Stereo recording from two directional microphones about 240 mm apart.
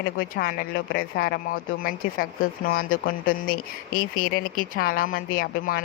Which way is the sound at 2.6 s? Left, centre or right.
Left.